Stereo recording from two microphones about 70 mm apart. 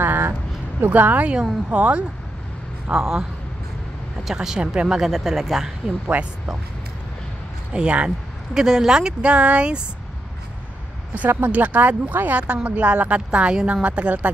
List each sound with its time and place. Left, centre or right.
0.0 s a sound: right
0.7 s speech: right
2.9 s speech: centre
6.0 s speech: right
7.7 s speech: centre
11.1 s speech: right